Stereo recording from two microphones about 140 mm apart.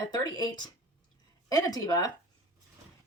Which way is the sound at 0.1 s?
30° left (ahead or behind).